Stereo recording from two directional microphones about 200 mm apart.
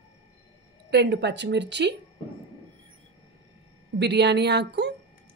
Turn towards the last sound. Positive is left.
turn(degrees=-55)  # may be behind; listen again after turning